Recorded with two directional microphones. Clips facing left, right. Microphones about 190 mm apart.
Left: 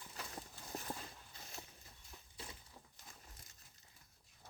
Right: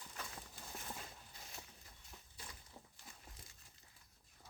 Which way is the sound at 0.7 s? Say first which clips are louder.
Left 6 dB; 35° left (ahead or behind).